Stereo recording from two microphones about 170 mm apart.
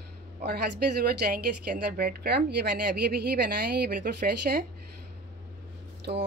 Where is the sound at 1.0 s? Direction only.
65° right (ahead or behind).